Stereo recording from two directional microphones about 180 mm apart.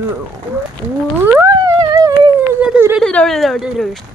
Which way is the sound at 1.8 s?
20° right (ahead or behind).